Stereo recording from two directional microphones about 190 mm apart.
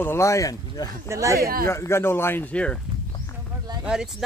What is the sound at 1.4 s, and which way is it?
Speech, 50° right (ahead or behind).